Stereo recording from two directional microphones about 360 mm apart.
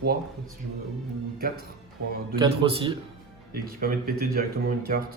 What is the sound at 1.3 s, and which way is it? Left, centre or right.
Speech, right.